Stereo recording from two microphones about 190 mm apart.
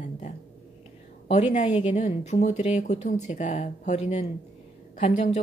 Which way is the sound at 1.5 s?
35° left (ahead or behind).